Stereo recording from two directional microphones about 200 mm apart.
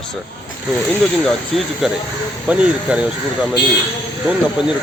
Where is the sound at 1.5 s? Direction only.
Centre (ahead or behind).